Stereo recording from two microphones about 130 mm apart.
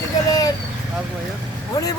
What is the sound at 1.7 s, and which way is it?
Speech, 30° left (ahead or behind).